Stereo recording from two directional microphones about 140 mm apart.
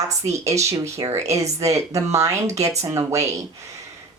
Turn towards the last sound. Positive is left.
turn(degrees=-20)  # may be behind; listen again after turning